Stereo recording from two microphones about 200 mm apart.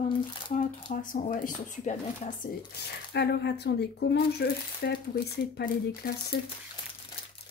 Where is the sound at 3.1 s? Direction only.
55° left (ahead or behind).